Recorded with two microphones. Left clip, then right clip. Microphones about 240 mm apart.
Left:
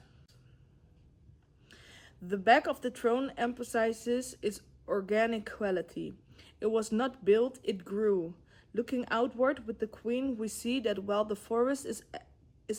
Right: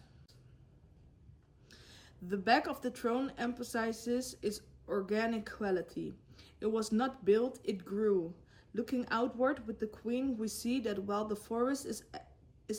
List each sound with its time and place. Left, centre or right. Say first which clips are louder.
1.7 s speech: left 3 dB; centre